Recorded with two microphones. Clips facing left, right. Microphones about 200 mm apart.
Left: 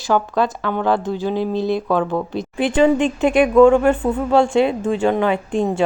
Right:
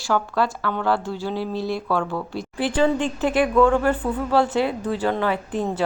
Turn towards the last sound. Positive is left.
turn(degrees=25)  # may be behind; listen again after turning